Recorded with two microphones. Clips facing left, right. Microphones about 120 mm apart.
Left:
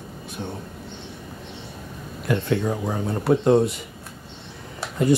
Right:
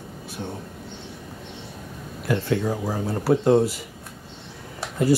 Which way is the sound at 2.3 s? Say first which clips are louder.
Left 1 dB; 30° left (ahead or behind).